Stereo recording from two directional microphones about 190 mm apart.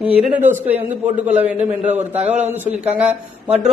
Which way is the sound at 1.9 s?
35° right (ahead or behind).